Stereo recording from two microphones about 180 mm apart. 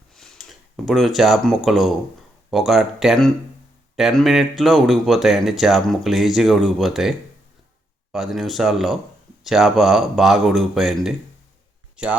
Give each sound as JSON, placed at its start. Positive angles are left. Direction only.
{"t": 0.1, "sound": "a sound", "side_deg": 0}
{"t": 0.9, "sound": "speech", "side_deg": 0}
{"t": 8.1, "sound": "speech", "side_deg": 0}